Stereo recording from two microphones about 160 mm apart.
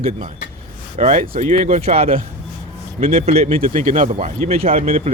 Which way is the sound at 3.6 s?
55° right (ahead or behind).